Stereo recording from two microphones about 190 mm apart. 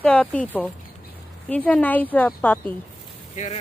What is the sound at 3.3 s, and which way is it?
Speech, 40° left (ahead or behind).